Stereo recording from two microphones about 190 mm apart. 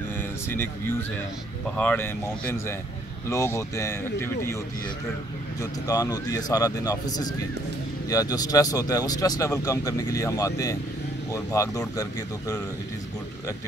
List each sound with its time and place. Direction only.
0.2 s a sound: 10° left (ahead or behind)
1.8 s speech: 10° left (ahead or behind)
5.6 s speech: 20° left (ahead or behind)